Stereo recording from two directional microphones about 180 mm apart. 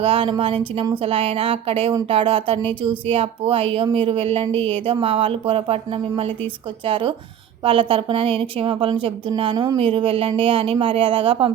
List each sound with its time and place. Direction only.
0.0 s a woman's voice: 30° right (ahead or behind)